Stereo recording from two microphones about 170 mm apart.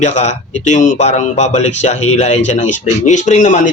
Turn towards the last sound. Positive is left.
turn(degrees=45)  # may be behind; listen again after turning